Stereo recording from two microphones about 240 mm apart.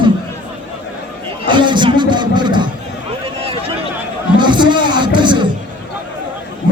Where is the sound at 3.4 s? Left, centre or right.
Right.